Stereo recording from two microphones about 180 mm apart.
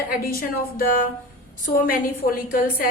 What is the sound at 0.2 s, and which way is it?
Speech, 55° left (ahead or behind).